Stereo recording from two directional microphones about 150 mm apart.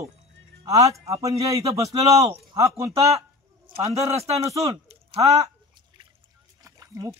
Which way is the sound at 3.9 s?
45° right (ahead or behind).